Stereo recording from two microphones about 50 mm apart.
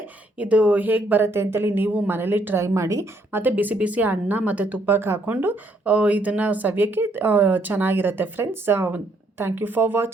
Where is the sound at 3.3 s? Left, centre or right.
Right.